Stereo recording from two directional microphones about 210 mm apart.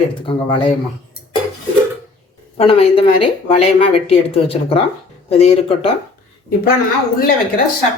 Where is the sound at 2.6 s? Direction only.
25° left (ahead or behind).